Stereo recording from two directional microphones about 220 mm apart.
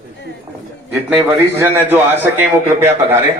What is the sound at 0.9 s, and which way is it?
A man's voice, 10° right (ahead or behind).